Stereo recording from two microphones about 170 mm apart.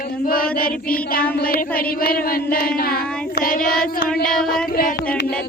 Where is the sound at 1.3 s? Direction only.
60° left (ahead or behind).